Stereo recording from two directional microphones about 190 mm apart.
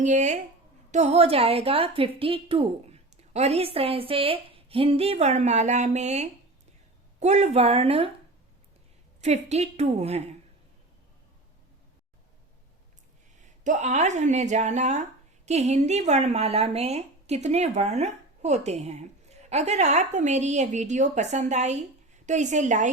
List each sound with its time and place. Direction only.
0.0 s a woman's voice: 40° right (ahead or behind)
9.2 s a woman's voice: 35° right (ahead or behind)
13.7 s a woman's voice: 40° right (ahead or behind)